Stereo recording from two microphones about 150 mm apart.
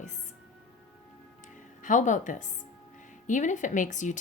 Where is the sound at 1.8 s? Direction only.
55° left (ahead or behind).